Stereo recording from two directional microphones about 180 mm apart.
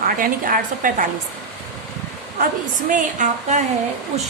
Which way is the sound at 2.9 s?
45° right (ahead or behind).